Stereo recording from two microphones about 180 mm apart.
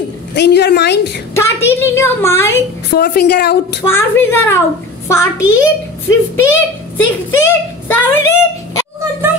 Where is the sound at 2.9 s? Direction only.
60° left (ahead or behind).